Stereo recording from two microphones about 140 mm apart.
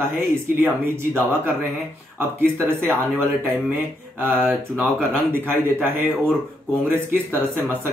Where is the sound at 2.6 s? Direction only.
15° right (ahead or behind).